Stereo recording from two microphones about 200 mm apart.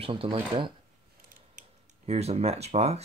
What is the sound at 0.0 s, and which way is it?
Speech, 25° right (ahead or behind).